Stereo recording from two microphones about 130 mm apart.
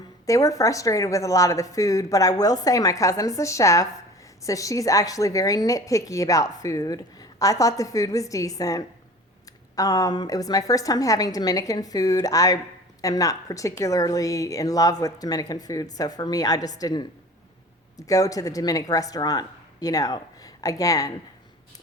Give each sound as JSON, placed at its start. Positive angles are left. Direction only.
{"t": 0.3, "sound": "a woman's voice", "side_deg": 25}